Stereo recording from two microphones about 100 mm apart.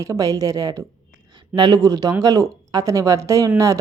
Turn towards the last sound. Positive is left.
turn(degrees=-30)  # may be behind; listen again after turning